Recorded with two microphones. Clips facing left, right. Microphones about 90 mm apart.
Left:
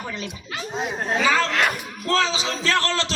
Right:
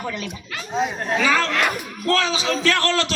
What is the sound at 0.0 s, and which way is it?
A man's voice, 25° left (ahead or behind).